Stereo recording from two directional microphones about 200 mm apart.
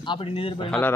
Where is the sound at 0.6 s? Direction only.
5° left (ahead or behind).